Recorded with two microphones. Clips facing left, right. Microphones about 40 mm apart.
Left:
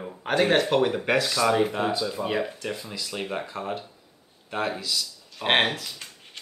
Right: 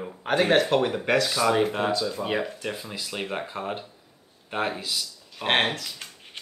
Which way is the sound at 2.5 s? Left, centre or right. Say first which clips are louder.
Even; centre.